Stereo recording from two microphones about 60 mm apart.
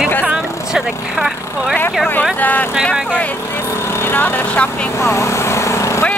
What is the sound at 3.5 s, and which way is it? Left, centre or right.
Speech, left.